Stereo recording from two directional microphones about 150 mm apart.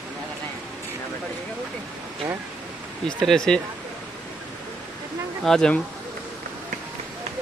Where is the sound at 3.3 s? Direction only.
5° left (ahead or behind).